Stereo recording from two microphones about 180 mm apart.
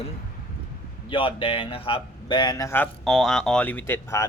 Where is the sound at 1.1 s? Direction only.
30° left (ahead or behind).